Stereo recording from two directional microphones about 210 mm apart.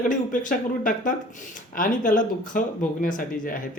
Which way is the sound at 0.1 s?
40° left (ahead or behind).